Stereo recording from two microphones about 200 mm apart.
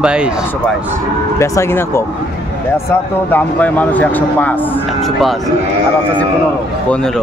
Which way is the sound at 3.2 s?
10° left (ahead or behind).